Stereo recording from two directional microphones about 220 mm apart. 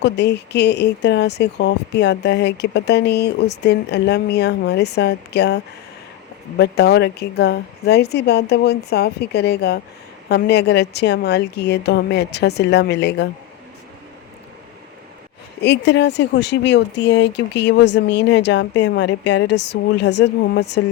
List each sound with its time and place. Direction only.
0.0 s speech: 50° left (ahead or behind)
6.6 s speech: 50° left (ahead or behind)
15.6 s speech: 50° left (ahead or behind)